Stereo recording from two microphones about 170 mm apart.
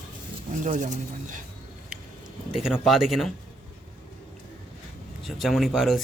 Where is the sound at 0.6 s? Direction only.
45° right (ahead or behind).